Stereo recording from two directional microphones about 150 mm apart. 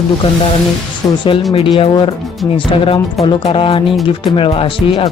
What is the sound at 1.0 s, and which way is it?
Speech, 20° left (ahead or behind).